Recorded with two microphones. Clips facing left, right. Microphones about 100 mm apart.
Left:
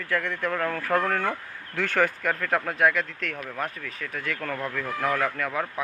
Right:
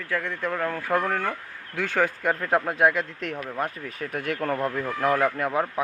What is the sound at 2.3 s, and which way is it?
Speech, 20° right (ahead or behind).